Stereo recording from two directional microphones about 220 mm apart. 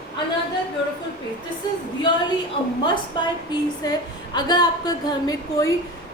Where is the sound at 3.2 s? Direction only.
20° left (ahead or behind).